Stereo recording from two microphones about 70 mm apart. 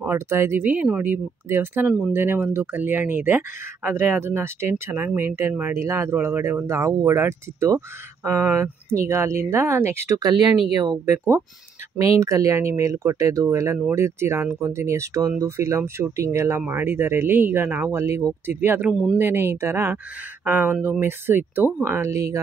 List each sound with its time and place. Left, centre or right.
0.0 s speech: right
10.1 s speech: right
12.0 s speech: right
18.6 s speech: right